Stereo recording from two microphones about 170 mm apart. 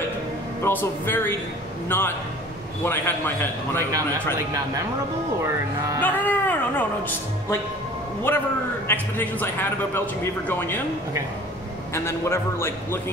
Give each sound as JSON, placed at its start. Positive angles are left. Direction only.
{"t": 0.7, "sound": "speech", "side_deg": 10}
{"t": 3.9, "sound": "speech", "side_deg": -20}
{"t": 5.9, "sound": "speech", "side_deg": 10}
{"t": 8.8, "sound": "speech", "side_deg": 10}
{"t": 11.9, "sound": "speech", "side_deg": 15}